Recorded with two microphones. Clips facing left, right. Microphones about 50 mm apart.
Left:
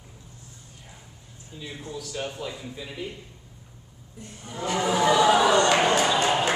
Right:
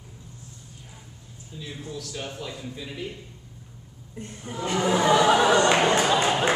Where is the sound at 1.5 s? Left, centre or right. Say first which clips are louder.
Even; centre.